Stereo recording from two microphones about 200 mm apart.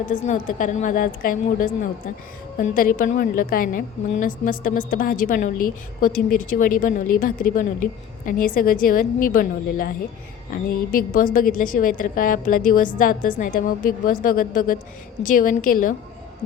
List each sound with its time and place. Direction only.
0.1 s a woman's voice: 40° left (ahead or behind)
10.9 s a woman's voice: 40° left (ahead or behind)